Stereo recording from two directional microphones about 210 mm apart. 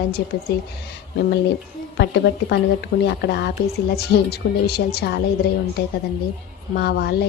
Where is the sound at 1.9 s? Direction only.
55° left (ahead or behind).